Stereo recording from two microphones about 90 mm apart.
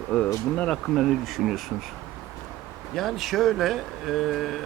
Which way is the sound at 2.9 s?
Centre (ahead or behind).